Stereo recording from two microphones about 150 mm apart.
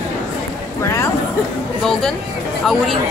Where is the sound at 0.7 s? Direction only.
20° left (ahead or behind).